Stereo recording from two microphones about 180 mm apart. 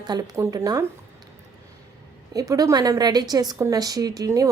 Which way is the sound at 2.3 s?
20° right (ahead or behind).